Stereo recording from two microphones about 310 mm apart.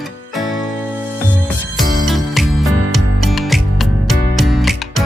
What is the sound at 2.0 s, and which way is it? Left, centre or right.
Music, centre.